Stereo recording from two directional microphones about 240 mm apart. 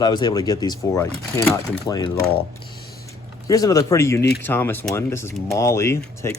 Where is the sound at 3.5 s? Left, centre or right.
Centre.